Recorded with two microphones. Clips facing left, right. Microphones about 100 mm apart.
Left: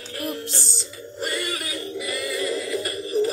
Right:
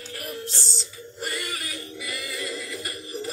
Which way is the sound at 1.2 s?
60° left (ahead or behind).